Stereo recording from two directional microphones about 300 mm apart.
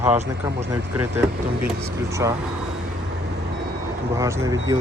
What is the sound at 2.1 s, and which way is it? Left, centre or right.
Speech, centre.